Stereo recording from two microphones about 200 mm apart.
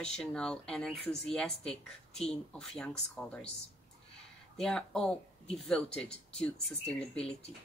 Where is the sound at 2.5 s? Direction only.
5° left (ahead or behind).